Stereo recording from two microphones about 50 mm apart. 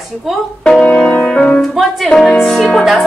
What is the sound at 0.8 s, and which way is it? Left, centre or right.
Music, centre.